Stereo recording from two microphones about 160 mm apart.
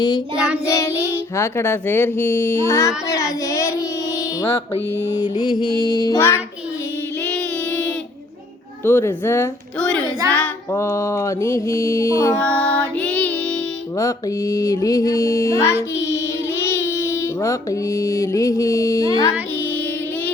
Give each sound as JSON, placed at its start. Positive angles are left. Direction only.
{"t": 0.6, "sound": "child singing", "side_deg": 20}
{"t": 5.0, "sound": "mantra", "side_deg": 25}
{"t": 7.3, "sound": "child singing", "side_deg": 10}
{"t": 10.3, "sound": "mantra", "side_deg": 10}
{"t": 12.4, "sound": "music", "side_deg": 10}
{"t": 14.0, "sound": "mantra", "side_deg": 20}
{"t": 16.0, "sound": "speech", "side_deg": 15}